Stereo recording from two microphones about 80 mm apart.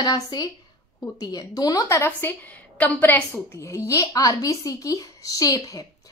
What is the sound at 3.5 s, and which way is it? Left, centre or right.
Speech, left.